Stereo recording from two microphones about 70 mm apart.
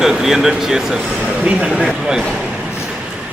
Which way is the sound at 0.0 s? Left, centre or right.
Centre.